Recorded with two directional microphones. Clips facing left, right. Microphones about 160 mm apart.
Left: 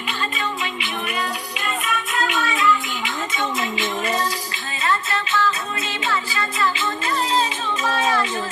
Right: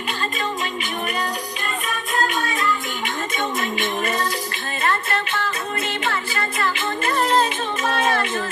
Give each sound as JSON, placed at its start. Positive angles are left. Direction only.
{"t": 1.9, "sound": "music", "side_deg": -45}
{"t": 3.3, "sound": "speech", "side_deg": -50}
{"t": 4.8, "sound": "music", "side_deg": -55}
{"t": 7.9, "sound": "a sound", "side_deg": -50}